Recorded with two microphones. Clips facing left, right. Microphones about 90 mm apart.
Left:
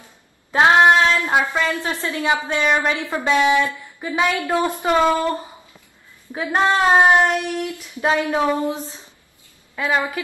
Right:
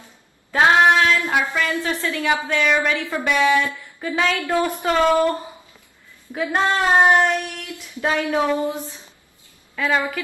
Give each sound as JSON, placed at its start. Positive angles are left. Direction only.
{"t": 0.5, "sound": "a woman's voice", "side_deg": 25}